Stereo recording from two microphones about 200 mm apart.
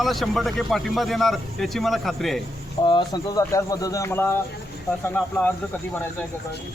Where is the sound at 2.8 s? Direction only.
20° left (ahead or behind).